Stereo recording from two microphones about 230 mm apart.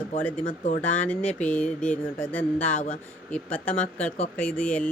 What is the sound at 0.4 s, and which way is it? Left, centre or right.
Speech, left.